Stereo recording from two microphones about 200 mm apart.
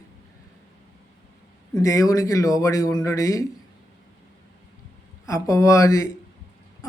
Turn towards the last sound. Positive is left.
turn(degrees=15)  # may be behind; listen again after turning